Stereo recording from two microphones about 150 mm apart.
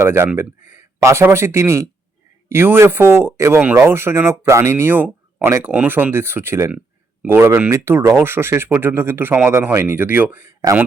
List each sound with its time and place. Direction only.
0.0 s speech: 15° right (ahead or behind)